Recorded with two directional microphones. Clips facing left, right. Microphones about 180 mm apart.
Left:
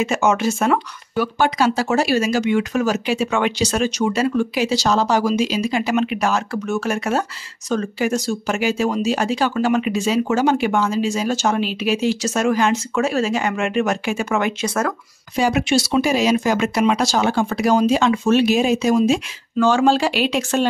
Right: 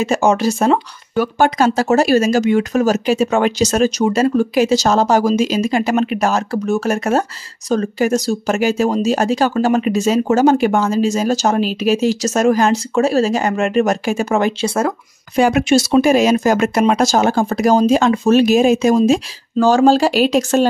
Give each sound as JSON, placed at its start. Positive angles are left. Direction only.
{"t": 0.0, "sound": "speech", "side_deg": -35}
{"t": 15.3, "sound": "speech", "side_deg": -50}